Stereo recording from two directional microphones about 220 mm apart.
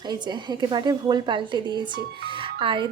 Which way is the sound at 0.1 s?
20° right (ahead or behind).